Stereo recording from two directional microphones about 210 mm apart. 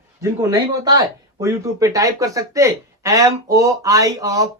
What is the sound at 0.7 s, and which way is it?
Speech, 20° right (ahead or behind).